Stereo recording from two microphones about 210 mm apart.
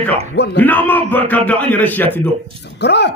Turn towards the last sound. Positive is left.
turn(degrees=55)  # may be behind; listen again after turning